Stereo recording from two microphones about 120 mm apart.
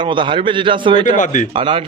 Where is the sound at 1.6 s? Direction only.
45° right (ahead or behind).